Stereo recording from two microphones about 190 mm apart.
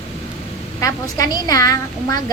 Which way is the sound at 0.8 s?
20° left (ahead or behind).